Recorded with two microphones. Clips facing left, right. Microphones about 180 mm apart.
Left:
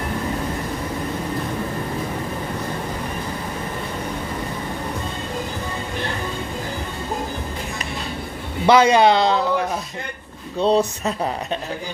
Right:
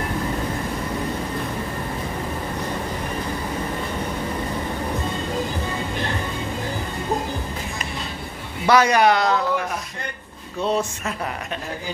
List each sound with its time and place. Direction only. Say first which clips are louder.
8.6 s a man's voice: left 3 dB; 25° left (ahead or behind)
10.6 s speech: left 5 dB; 35° left (ahead or behind)